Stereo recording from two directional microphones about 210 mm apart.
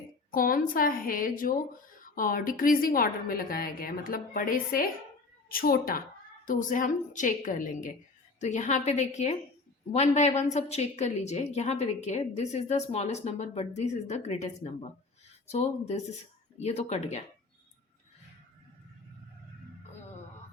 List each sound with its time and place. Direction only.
0.3 s a woman's voice: 40° left (ahead or behind)